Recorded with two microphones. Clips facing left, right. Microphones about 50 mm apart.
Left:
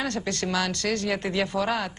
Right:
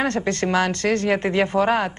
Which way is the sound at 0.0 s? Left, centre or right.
Right.